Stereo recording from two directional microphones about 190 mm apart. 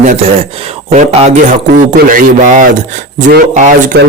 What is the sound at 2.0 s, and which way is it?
A man's voice, 45° right (ahead or behind).